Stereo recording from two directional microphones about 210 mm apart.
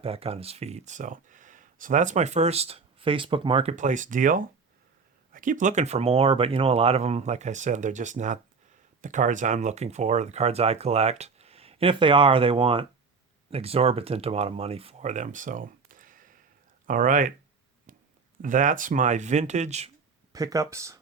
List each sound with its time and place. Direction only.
0.0 s speech: 30° right (ahead or behind)
17.9 s a sound: 40° right (ahead or behind)
18.4 s speech: 40° right (ahead or behind)
20.3 s speech: 15° right (ahead or behind)